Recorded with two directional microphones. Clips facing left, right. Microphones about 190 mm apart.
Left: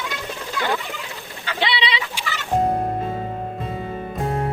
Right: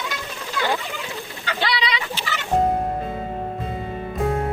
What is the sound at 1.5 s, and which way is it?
Bird, 25° left (ahead or behind).